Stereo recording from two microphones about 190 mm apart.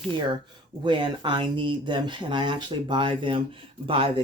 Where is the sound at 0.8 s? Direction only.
25° right (ahead or behind).